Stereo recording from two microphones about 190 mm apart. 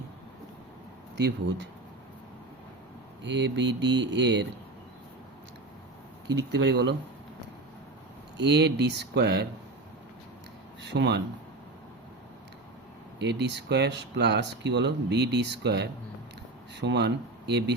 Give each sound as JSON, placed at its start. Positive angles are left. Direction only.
{"t": 1.1, "sound": "speech", "side_deg": -70}
{"t": 3.2, "sound": "speech", "side_deg": -70}
{"t": 6.3, "sound": "speech", "side_deg": -65}
{"t": 8.4, "sound": "speech", "side_deg": -60}
{"t": 10.8, "sound": "speech", "side_deg": -65}
{"t": 13.1, "sound": "speech", "side_deg": -65}